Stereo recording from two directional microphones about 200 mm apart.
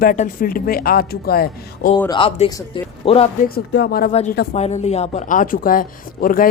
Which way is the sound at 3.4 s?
55° left (ahead or behind).